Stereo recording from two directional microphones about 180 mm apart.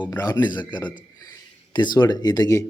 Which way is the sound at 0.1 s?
20° left (ahead or behind).